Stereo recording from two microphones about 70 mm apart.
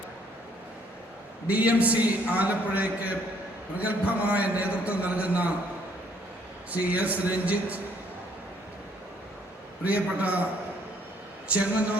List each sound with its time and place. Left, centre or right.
1.5 s a man's voice: right
6.7 s a man's voice: right
9.8 s a man's voice: right
11.4 s speech: centre